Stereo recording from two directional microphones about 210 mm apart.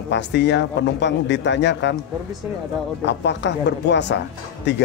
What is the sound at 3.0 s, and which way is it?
A man's voice, 55° left (ahead or behind).